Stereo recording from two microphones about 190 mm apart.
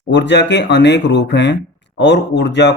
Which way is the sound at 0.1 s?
70° left (ahead or behind).